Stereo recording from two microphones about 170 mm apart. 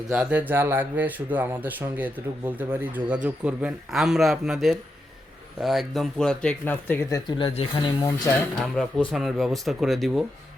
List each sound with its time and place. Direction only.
0.1 s speech: 5° right (ahead or behind); by 7.2 s 10° left (ahead or behind)
7.3 s speech: 30° left (ahead or behind)
8.7 s speech: 5° left (ahead or behind)